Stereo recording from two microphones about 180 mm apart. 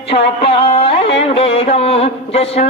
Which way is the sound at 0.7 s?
30° left (ahead or behind).